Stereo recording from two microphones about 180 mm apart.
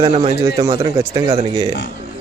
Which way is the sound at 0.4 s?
20° right (ahead or behind).